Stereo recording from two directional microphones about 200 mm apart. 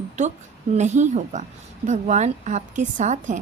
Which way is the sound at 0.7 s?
35° right (ahead or behind).